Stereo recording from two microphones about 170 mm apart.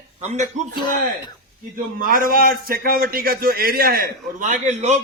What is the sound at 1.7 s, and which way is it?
A man's voice, 55° right (ahead or behind).